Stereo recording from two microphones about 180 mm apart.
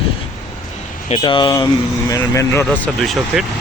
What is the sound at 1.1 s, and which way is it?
Speech, 30° left (ahead or behind).